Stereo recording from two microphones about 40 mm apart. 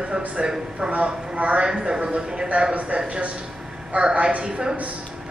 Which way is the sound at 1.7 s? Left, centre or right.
Right.